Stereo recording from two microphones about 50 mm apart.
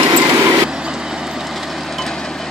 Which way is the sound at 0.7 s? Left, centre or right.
Centre.